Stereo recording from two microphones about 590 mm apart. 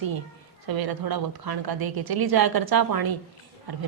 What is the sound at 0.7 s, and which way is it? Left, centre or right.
A woman's voice, right.